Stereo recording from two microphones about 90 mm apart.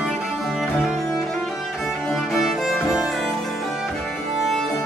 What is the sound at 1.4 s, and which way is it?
Music, centre (ahead or behind).